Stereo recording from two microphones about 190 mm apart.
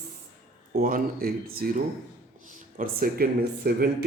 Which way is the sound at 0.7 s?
50° right (ahead or behind).